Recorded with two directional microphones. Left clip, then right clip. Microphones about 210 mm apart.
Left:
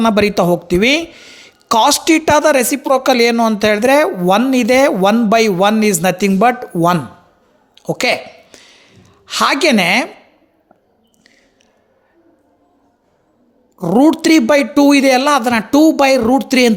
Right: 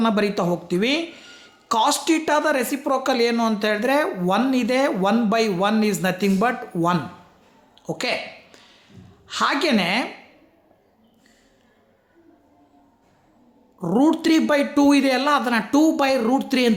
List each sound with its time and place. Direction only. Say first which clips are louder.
0.0 s a woman's voice: left 9 dB; 40° left (ahead or behind)
7.8 s a sound: left 9 dB; 35° left (ahead or behind)
13.7 s a woman's voice: left 8 dB; 35° left (ahead or behind)